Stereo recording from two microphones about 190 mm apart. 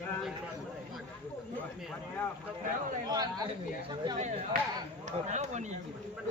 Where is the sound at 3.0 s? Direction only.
20° right (ahead or behind).